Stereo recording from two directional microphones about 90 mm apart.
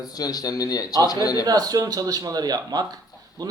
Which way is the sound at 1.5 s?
45° right (ahead or behind).